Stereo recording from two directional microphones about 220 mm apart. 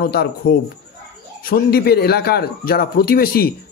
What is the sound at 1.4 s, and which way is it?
A man's voice, 40° left (ahead or behind).